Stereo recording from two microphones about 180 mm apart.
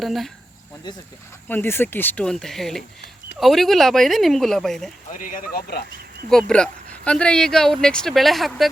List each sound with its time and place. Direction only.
0.0 s speech: centre (ahead or behind)
0.9 s speech: 25° left (ahead or behind)
1.5 s speech: 10° left (ahead or behind)
5.1 s speech: 50° left (ahead or behind)
6.3 s speech: 5° left (ahead or behind)